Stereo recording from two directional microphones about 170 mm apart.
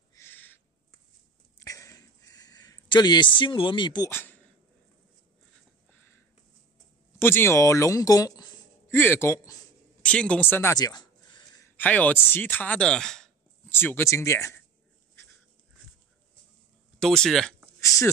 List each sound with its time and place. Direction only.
0.1 s owl: 15° left (ahead or behind)
1.6 s a sound: 20° left (ahead or behind)
4.1 s speech: 10° left (ahead or behind)
7.2 s speech: 15° left (ahead or behind)
10.0 s a sound: 5° left (ahead or behind); by 11.6 s 25° left (ahead or behind)
11.7 s speech: 10° left (ahead or behind)
17.0 s speech: 5° left (ahead or behind)
17.7 s speech: 15° left (ahead or behind)